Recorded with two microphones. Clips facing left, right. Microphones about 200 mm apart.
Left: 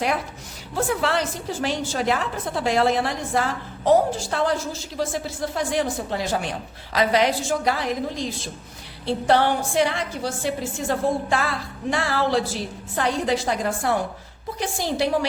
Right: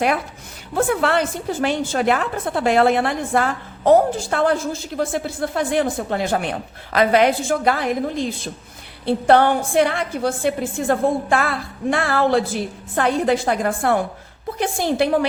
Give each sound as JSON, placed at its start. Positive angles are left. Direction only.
{"t": 0.8, "sound": "a woman's voice", "side_deg": -55}